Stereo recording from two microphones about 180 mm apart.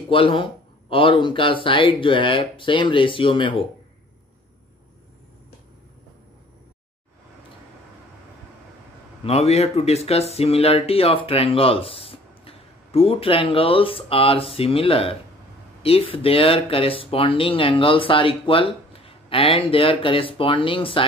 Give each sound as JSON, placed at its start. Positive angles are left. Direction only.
{"t": 0.1, "sound": "speech", "side_deg": 30}
{"t": 9.2, "sound": "speech", "side_deg": 35}